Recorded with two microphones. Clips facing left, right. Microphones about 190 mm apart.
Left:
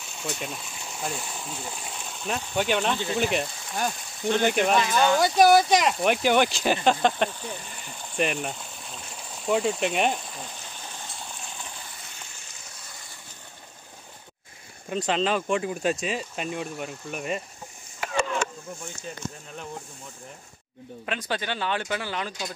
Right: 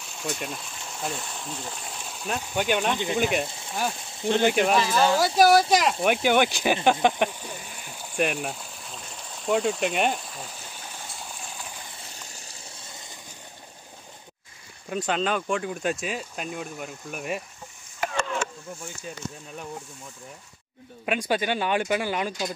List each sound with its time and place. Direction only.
0.2 s speech: centre (ahead or behind)
4.2 s speech: 30° right (ahead or behind)
4.5 s speech: centre (ahead or behind)
12.3 s vehicle: 35° right (ahead or behind)
14.9 s speech: centre (ahead or behind)
21.0 s speech: 10° right (ahead or behind)